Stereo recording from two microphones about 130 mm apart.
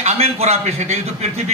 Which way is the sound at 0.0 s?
55° right (ahead or behind).